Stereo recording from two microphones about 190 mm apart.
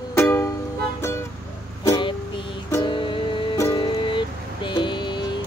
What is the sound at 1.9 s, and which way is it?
Music, 25° left (ahead or behind).